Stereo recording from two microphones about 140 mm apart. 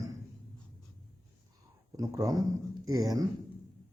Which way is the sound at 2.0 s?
25° right (ahead or behind).